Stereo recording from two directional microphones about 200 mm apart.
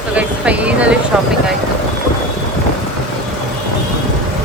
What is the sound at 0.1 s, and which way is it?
Speech, 5° right (ahead or behind).